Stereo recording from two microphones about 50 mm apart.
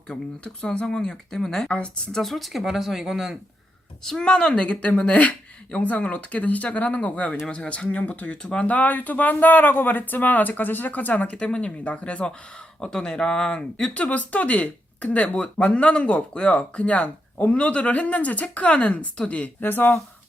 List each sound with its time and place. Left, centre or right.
0.1 s speech: centre
2.2 s speech: centre
4.0 s speech: centre; by 12.3 s left
12.8 s speech: centre
19.6 s speech: left